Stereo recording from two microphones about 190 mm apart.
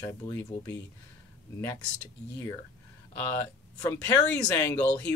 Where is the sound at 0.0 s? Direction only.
15° left (ahead or behind).